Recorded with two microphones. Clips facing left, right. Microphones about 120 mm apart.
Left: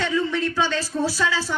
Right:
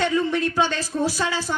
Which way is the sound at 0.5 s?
15° right (ahead or behind).